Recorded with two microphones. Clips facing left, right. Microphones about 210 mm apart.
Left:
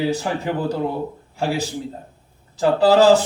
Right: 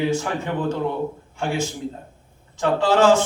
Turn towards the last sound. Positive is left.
turn(degrees=35)  # may be behind; listen again after turning